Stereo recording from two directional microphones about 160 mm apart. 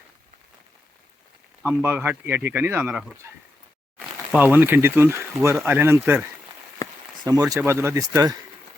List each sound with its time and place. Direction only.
1.6 s speech: 10° right (ahead or behind)
7.5 s speech: 15° right (ahead or behind)